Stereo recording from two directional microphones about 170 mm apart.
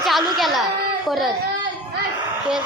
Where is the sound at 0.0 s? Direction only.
Centre (ahead or behind).